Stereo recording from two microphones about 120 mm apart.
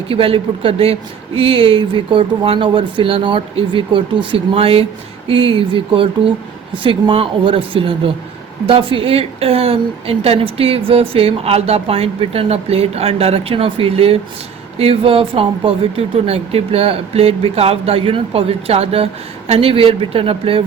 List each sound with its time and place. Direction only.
0.1 s speech: 50° right (ahead or behind)